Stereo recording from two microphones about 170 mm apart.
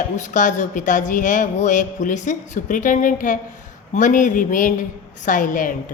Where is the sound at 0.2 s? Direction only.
50° left (ahead or behind).